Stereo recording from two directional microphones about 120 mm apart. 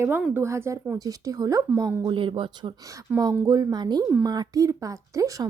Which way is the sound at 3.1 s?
15° right (ahead or behind).